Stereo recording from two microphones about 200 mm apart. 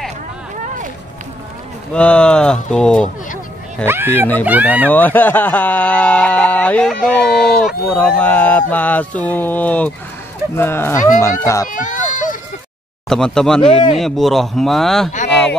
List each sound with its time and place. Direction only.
2.0 s speech: 5° left (ahead or behind)
3.8 s speech: 10° right (ahead or behind)
4.8 s speech: 10° left (ahead or behind)
11.7 s a sound: 40° left (ahead or behind)
13.1 s speech: 5° left (ahead or behind)
13.6 s speech: 25° left (ahead or behind)
13.9 s speech: centre (ahead or behind)